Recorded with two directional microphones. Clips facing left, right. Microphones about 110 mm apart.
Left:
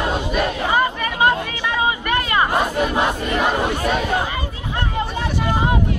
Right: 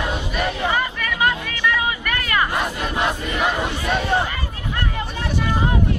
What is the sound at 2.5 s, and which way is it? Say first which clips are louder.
Crowd: left 5 dB; 40° left (ahead or behind).